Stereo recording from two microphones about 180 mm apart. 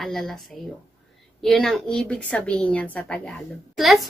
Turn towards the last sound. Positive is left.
turn(degrees=0)  # may be behind; listen again after turning